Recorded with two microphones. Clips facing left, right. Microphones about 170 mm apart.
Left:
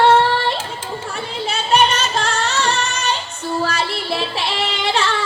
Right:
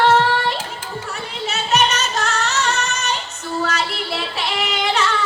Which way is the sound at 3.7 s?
30° left (ahead or behind).